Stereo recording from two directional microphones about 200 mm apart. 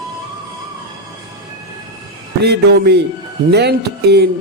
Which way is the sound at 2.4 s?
55° right (ahead or behind).